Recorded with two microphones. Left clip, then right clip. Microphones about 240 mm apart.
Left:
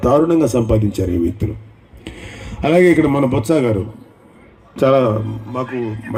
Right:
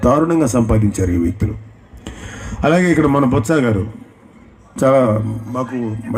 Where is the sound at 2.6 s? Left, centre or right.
Right.